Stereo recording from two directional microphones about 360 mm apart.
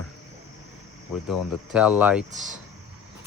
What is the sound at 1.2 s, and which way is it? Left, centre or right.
Speech, centre.